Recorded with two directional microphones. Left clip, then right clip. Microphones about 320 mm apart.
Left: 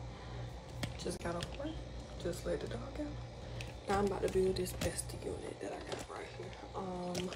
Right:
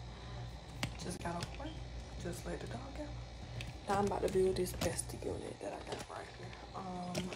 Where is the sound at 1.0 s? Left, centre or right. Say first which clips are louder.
Left 6 dB; centre.